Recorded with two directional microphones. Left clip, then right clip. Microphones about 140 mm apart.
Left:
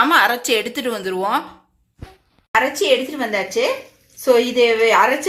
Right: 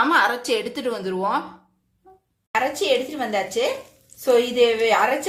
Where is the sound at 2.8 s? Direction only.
45° left (ahead or behind).